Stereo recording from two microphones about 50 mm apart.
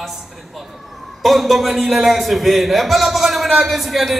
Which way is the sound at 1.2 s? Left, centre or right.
Centre.